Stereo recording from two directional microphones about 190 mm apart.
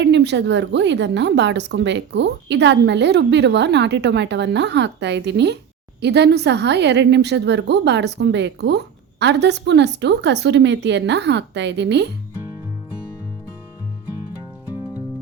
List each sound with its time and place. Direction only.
0.0 s a woman's voice: 65° right (ahead or behind)